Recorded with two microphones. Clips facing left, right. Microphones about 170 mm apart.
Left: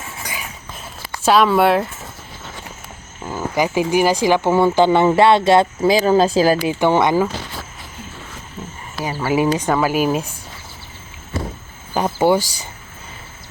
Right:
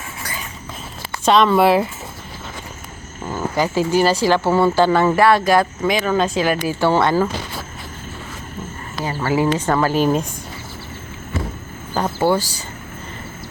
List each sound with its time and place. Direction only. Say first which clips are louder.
1.2 s speech: even; 5° left (ahead or behind)
3.2 s speech: left 1 dB; 10° left (ahead or behind); by 6.6 s 35° left (ahead or behind)
6.6 s speech: left 1 dB; 15° left (ahead or behind)
9.0 s speech: left 1 dB; 15° left (ahead or behind)
11.9 s speech: left 2 dB; 15° left (ahead or behind)